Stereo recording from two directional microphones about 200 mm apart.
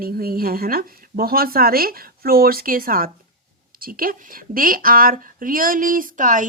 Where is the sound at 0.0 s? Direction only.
50° right (ahead or behind).